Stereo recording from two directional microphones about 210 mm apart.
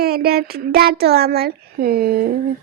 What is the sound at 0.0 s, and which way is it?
A woman's voice, 45° right (ahead or behind).